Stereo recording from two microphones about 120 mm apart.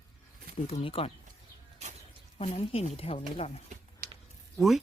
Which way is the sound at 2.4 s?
60° left (ahead or behind).